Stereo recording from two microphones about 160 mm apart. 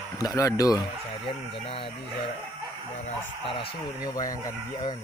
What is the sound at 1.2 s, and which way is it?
Speech, 35° left (ahead or behind).